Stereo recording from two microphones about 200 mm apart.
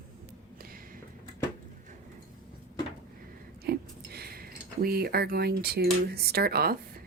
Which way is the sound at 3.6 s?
50° right (ahead or behind).